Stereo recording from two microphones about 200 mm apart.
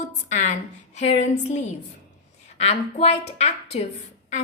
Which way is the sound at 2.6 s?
30° left (ahead or behind).